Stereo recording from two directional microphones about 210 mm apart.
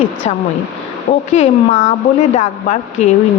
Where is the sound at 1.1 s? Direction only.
40° left (ahead or behind).